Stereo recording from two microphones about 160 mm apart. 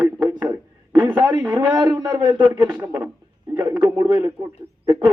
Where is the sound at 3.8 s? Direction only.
25° right (ahead or behind).